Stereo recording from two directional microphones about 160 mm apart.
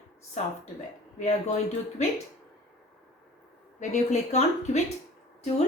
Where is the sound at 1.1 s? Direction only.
50° left (ahead or behind).